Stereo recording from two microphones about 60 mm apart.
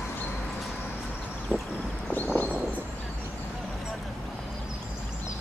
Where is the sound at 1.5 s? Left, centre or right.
Left.